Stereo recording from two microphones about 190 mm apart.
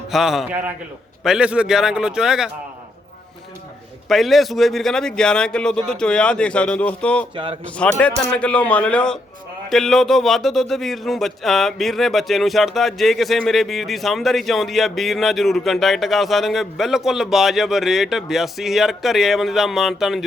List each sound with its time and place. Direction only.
0.1 s a man's voice: centre (ahead or behind)
4.1 s a man's voice: centre (ahead or behind)
7.3 s speech: 25° right (ahead or behind)
7.6 s a man's voice: 5° left (ahead or behind)